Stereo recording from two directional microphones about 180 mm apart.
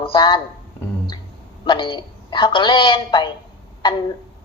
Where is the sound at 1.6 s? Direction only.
25° left (ahead or behind).